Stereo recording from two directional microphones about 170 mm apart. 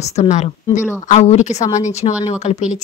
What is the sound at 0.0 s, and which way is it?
A woman's voice, 40° left (ahead or behind).